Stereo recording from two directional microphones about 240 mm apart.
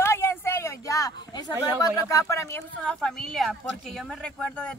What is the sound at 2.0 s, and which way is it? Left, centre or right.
Speech, centre.